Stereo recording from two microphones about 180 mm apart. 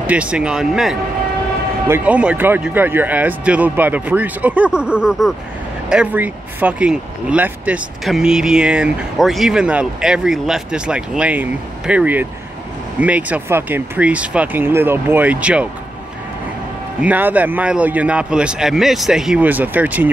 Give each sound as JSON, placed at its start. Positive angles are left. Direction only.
{"t": 0.0, "sound": "speech", "side_deg": -5}
{"t": 17.0, "sound": "speech", "side_deg": -10}